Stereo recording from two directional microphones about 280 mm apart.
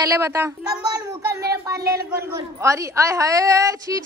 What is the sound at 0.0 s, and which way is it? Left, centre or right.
Speech, centre.